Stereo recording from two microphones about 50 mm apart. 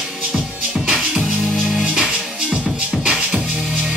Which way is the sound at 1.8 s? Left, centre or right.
Centre.